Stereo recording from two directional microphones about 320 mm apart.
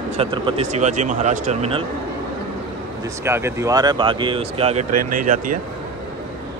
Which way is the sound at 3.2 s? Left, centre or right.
Centre.